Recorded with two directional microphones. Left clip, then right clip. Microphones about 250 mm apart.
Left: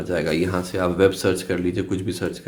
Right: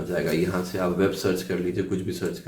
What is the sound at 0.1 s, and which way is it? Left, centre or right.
Speech, left.